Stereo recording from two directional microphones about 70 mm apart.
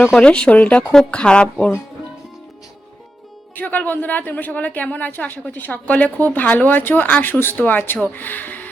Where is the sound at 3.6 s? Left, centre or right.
Left.